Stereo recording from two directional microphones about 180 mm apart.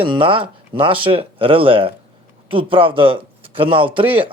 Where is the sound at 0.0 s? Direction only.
30° right (ahead or behind).